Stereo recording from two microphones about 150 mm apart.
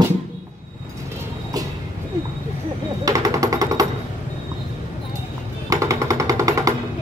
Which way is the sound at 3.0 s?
25° right (ahead or behind).